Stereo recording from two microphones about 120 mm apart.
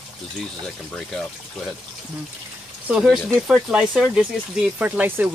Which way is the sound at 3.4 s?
5° right (ahead or behind).